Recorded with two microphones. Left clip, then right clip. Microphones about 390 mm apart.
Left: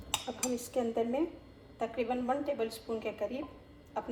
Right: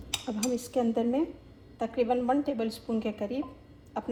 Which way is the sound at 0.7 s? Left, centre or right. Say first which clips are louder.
Right 4 dB; centre.